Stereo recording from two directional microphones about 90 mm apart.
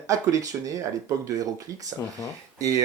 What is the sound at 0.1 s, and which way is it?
Speech, 40° right (ahead or behind).